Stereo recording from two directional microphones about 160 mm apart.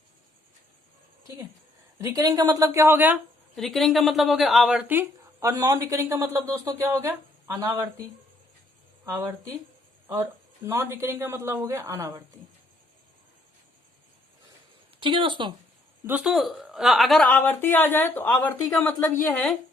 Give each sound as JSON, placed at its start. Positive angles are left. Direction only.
{"t": 2.0, "sound": "speech", "side_deg": -20}
{"t": 3.5, "sound": "a woman's voice", "side_deg": 0}
{"t": 9.0, "sound": "speech", "side_deg": -20}
{"t": 10.7, "sound": "speech", "side_deg": -15}
{"t": 15.0, "sound": "speech", "side_deg": -30}
{"t": 16.0, "sound": "a woman's voice", "side_deg": -10}